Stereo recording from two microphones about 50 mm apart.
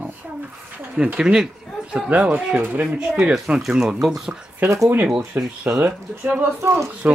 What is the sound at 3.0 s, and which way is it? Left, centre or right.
Speech, centre.